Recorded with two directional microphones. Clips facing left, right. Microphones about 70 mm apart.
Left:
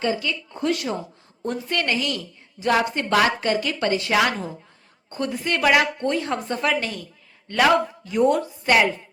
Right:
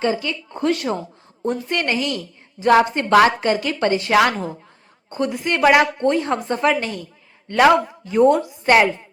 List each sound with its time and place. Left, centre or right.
0.0 s speech: right
1.5 s a woman's voice: right
4.1 s a woman's voice: right
5.0 s a woman's voice: right